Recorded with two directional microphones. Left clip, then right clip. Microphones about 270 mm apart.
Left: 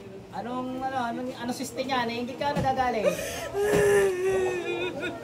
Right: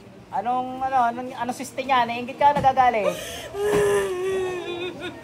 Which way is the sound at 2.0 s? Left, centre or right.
Right.